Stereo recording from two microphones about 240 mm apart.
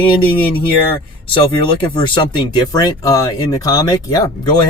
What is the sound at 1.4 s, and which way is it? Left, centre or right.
Speech, left.